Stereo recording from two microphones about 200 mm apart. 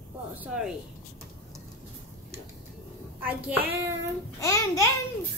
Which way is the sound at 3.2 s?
10° right (ahead or behind).